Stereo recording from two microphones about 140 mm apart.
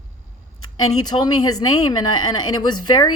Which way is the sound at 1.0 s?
30° left (ahead or behind).